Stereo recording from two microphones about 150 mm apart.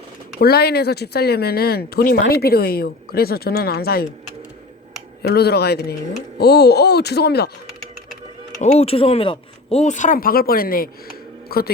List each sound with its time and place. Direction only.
0.3 s speech: 90° left
5.2 s speech: 90° left
8.6 s speech: 45° left (ahead or behind); by 10.8 s 75° left (ahead or behind)
11.4 s a man's voice: 90° left